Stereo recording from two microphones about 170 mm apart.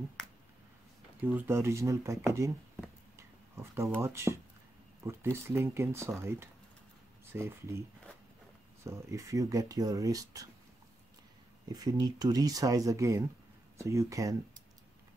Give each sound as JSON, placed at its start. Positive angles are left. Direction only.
{"t": 1.2, "sound": "speech", "side_deg": -10}
{"t": 3.2, "sound": "a sound", "side_deg": -15}
{"t": 5.0, "sound": "speech", "side_deg": -15}
{"t": 8.8, "sound": "speech", "side_deg": -15}
{"t": 11.7, "sound": "speech", "side_deg": -20}